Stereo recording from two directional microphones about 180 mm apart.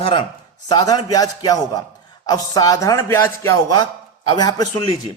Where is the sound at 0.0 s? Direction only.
25° left (ahead or behind).